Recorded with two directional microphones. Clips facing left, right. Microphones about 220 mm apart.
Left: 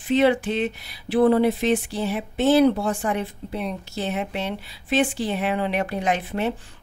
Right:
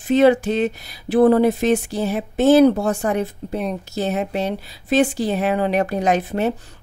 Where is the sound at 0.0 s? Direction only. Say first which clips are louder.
Right 5 dB; 45° right (ahead or behind).